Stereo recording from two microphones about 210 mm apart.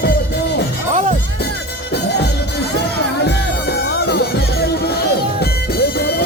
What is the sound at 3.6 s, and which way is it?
Music, 50° left (ahead or behind).